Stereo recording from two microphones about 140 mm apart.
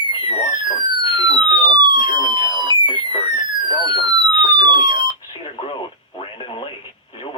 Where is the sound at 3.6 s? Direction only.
35° left (ahead or behind).